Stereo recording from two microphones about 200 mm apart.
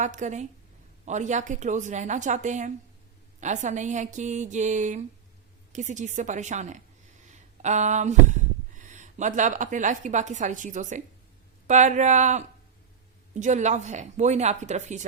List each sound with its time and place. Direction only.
0.0 s speech: 35° right (ahead or behind)
7.3 s a sound: 35° right (ahead or behind)
11.7 s speech: 35° right (ahead or behind)